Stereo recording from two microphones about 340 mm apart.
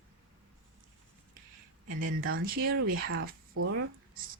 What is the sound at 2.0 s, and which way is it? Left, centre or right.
Speech, right.